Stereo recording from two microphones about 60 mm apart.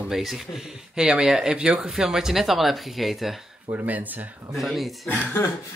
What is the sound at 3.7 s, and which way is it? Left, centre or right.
Speech, right.